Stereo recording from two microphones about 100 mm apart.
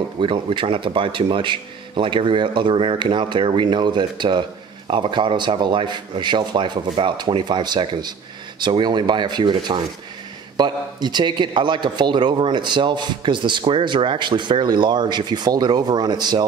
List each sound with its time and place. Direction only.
0.2 s speech: 55° right (ahead or behind)